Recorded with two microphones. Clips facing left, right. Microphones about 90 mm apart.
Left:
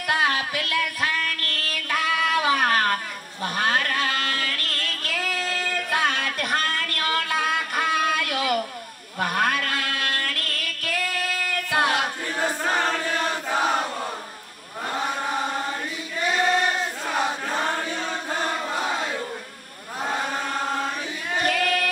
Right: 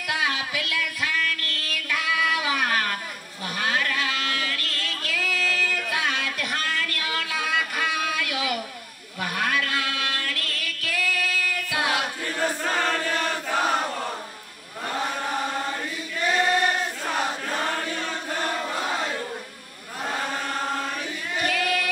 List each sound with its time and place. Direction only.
0.1 s child singing: 40° left (ahead or behind)
3.4 s a sound: 45° left (ahead or behind)
12.3 s chant: 25° left (ahead or behind)
14.9 s chant: 15° left (ahead or behind)
17.1 s chant: 15° left (ahead or behind)
21.4 s singing: 40° left (ahead or behind)